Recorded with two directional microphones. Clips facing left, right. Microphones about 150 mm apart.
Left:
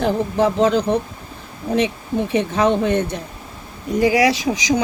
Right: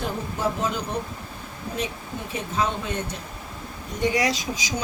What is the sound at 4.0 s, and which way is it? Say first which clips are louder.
Speech: left 8 dB; 90° left.